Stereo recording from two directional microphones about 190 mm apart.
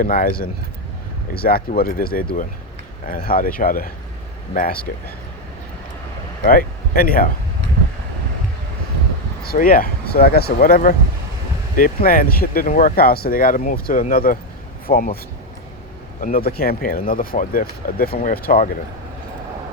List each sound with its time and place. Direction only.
0.0 s speech: 50° left (ahead or behind)
6.4 s speech: 50° left (ahead or behind)
9.4 s speech: 50° left (ahead or behind)
16.2 s speech: 50° left (ahead or behind)